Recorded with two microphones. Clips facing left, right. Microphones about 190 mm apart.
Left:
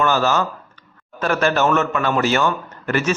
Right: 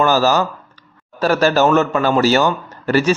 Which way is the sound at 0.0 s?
35° right (ahead or behind).